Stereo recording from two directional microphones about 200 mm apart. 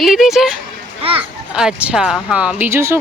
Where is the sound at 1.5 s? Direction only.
5° right (ahead or behind).